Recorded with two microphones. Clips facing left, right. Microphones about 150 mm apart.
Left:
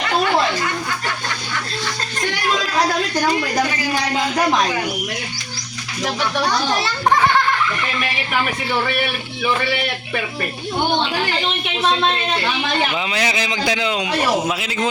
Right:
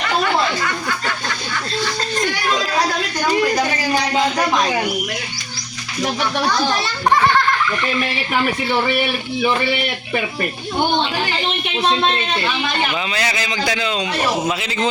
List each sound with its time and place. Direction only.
13.1 s a man's voice: 15° left (ahead or behind)
14.4 s a man's voice: 5° left (ahead or behind)